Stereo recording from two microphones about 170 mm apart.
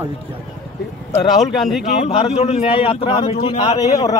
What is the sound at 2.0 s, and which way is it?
A man's voice, 35° left (ahead or behind).